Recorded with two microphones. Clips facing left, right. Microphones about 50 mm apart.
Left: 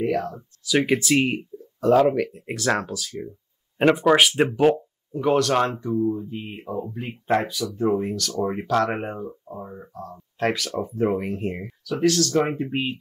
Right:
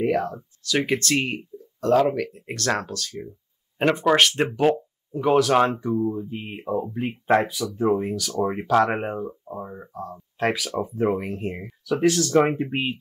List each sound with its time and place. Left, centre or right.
0.0 s speech: centre
0.7 s speech: centre
11.9 s speech: centre